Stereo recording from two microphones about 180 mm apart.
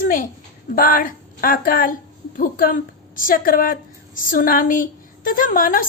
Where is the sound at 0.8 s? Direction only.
50° left (ahead or behind).